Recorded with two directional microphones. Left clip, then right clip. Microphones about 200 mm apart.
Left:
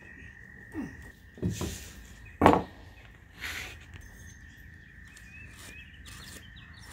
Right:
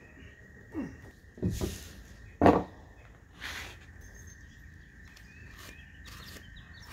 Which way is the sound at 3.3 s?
25° left (ahead or behind).